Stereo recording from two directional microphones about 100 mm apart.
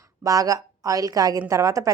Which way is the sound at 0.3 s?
35° right (ahead or behind).